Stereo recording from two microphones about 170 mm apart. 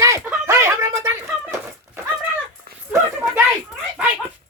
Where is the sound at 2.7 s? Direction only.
65° right (ahead or behind).